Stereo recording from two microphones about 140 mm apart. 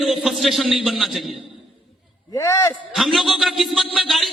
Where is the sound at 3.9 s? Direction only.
Centre (ahead or behind).